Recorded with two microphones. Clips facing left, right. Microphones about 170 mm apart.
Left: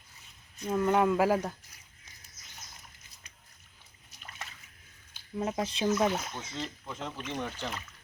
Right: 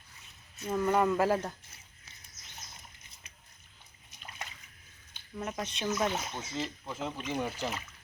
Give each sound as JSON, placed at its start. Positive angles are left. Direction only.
{"t": 0.7, "sound": "speech", "side_deg": 5}
{"t": 5.4, "sound": "speech", "side_deg": 20}
{"t": 6.0, "sound": "speech", "side_deg": 0}